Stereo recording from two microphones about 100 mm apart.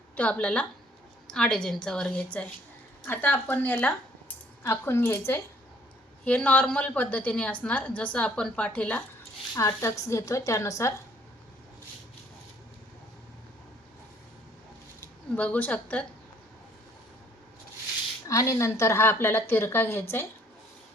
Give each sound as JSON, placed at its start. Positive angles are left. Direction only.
{"t": 0.2, "sound": "a woman's voice", "side_deg": 15}
{"t": 9.6, "sound": "a woman's voice", "side_deg": 30}
{"t": 15.4, "sound": "a woman's voice", "side_deg": 15}
{"t": 18.3, "sound": "a woman's voice", "side_deg": 35}